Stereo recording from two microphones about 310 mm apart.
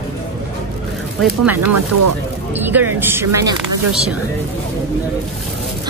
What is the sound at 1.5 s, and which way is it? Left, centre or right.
Speech, right.